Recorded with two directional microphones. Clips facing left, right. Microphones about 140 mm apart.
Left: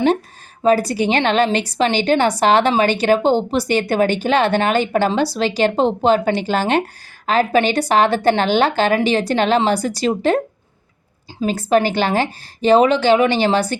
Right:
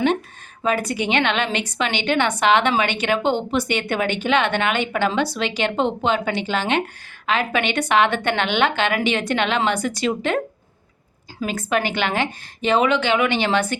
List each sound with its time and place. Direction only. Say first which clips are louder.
0.6 s a woman's voice: left 6 dB; 35° left (ahead or behind)